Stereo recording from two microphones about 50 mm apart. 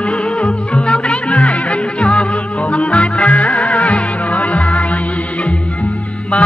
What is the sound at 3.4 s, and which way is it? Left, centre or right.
Music, centre.